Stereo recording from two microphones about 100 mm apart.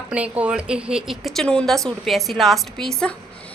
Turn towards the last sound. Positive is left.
turn(degrees=5)  # may be behind; listen again after turning